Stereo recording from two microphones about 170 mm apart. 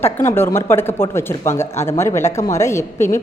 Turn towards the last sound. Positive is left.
turn(degrees=15)  # may be behind; listen again after turning